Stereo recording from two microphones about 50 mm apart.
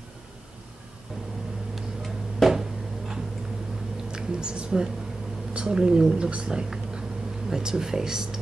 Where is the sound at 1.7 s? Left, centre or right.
Centre.